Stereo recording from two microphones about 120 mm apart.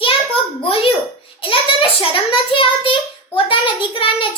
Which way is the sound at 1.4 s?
50° left (ahead or behind).